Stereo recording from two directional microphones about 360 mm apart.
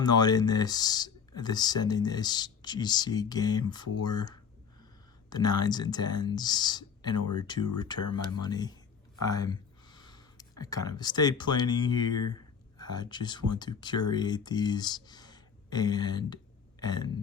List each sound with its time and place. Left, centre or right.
0.0 s speech: centre